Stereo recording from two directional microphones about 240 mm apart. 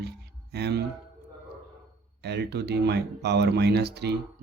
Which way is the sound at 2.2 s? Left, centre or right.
Right.